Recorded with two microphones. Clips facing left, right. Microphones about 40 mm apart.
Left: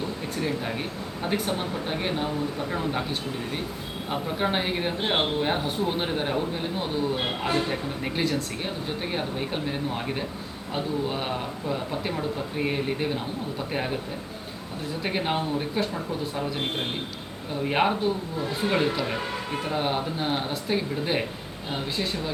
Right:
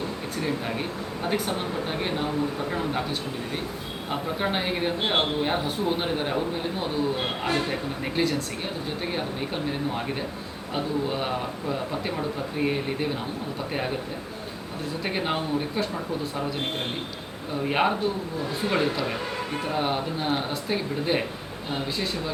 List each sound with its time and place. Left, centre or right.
0.3 s speech: centre
15.0 s speech: centre
17.6 s speech: centre